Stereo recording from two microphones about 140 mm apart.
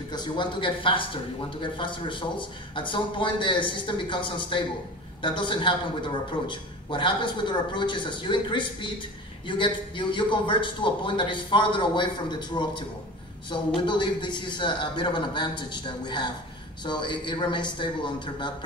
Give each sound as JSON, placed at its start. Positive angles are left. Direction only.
{"t": 0.1, "sound": "speech", "side_deg": 35}